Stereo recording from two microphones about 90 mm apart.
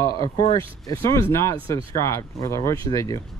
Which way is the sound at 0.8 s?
40° left (ahead or behind).